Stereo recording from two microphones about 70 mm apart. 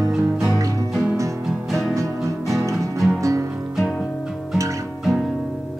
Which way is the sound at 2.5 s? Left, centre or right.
Right.